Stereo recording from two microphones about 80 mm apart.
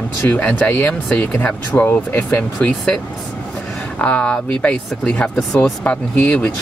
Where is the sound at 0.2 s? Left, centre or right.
Centre.